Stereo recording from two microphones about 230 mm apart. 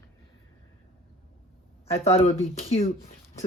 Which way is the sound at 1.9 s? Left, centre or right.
Left.